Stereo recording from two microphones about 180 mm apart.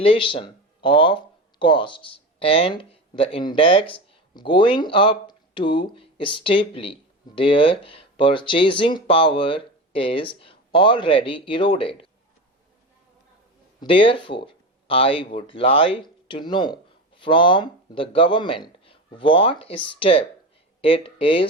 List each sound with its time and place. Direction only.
0.0 s speech: 30° left (ahead or behind)
13.7 s speech: 30° left (ahead or behind)